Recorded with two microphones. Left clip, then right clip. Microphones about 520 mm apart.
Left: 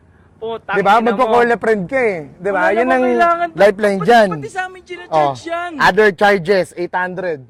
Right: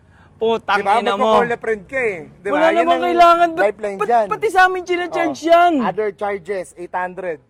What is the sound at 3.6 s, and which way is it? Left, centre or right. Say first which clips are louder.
Speech: left 7 dB; left.